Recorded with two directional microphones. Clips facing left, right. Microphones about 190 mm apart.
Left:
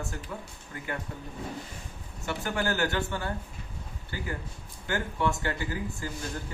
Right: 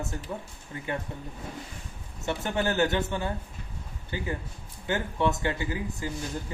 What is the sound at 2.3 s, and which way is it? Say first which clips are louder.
Speech: right 2 dB; 20° right (ahead or behind).